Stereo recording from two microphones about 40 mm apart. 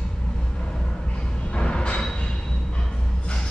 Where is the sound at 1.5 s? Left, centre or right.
Left.